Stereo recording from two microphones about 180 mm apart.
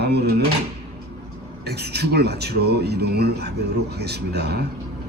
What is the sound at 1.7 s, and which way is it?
Speech, 65° right (ahead or behind).